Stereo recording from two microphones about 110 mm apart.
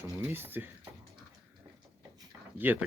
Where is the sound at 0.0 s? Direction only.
20° right (ahead or behind).